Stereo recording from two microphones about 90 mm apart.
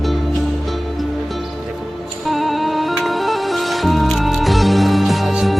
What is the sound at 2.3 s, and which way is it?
Music, centre (ahead or behind).